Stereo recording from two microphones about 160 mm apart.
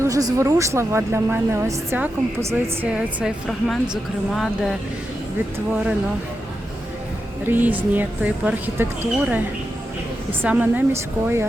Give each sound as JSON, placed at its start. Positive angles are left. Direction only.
{"t": 0.0, "sound": "a woman's voice", "side_deg": -20}
{"t": 7.4, "sound": "speech", "side_deg": -10}
{"t": 10.4, "sound": "speech", "side_deg": -10}